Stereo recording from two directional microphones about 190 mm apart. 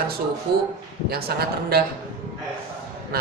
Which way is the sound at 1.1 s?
55° right (ahead or behind).